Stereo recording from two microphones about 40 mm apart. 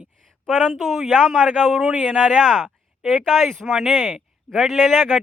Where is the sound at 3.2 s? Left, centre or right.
Centre.